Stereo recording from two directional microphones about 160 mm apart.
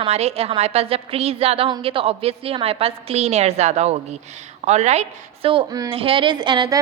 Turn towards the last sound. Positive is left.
turn(degrees=-25)  # may be behind; listen again after turning